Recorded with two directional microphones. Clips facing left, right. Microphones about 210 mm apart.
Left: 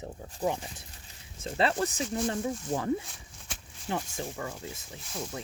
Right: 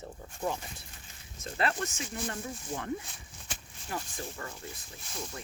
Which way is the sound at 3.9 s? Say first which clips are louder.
Left 5 dB; 25° left (ahead or behind).